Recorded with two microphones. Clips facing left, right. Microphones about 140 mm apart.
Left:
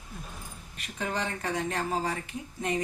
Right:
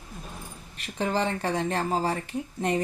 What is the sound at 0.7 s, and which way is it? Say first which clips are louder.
A woman's voice: right 6 dB; 35° right (ahead or behind).